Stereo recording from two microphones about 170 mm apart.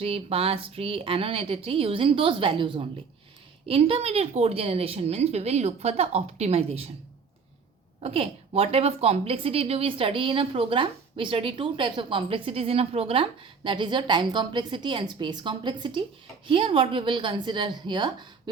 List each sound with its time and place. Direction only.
0.0 s a woman's voice: 35° right (ahead or behind)
8.0 s a woman's voice: 35° right (ahead or behind)